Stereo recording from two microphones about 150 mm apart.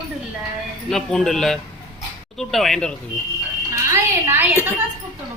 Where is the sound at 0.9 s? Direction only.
5° left (ahead or behind).